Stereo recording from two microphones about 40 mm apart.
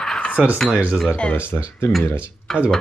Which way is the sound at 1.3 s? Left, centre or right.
Left.